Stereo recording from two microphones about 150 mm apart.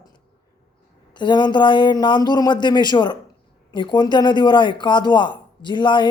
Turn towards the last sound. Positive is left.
turn(degrees=30)  # may be behind; listen again after turning